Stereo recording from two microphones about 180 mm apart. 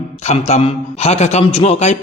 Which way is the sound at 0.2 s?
35° left (ahead or behind).